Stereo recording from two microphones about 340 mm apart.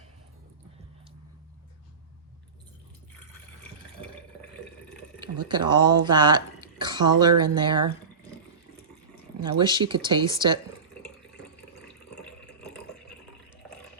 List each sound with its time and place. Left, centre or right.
5.5 s speech: centre
7.3 s speech: right
7.5 s speech: centre
9.6 s speech: centre